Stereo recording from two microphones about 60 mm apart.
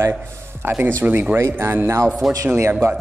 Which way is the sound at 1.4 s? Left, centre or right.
Right.